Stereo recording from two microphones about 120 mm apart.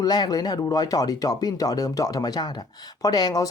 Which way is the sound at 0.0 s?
35° left (ahead or behind).